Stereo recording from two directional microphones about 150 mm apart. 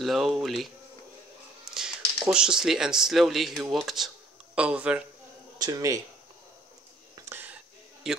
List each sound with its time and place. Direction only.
0.0 s speech: centre (ahead or behind)
2.2 s speech: 5° right (ahead or behind)
5.6 s speech: 25° right (ahead or behind)
7.2 s a sound: 10° right (ahead or behind)